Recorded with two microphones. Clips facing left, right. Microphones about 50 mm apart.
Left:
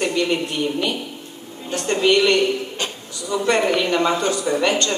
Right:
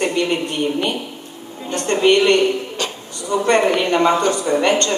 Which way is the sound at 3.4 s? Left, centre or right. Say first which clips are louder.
Right 3 dB; right.